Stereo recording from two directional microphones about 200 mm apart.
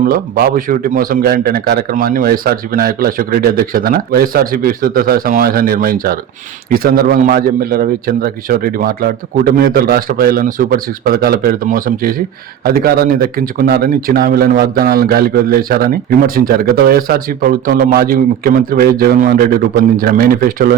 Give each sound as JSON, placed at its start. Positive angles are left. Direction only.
{"t": 0.0, "sound": "speech", "side_deg": -45}